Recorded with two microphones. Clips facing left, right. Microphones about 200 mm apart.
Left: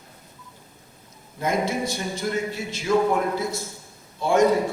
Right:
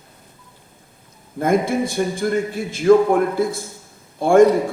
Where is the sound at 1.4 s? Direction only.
55° right (ahead or behind).